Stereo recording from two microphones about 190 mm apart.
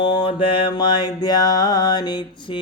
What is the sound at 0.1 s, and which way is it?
Mantra, 25° left (ahead or behind).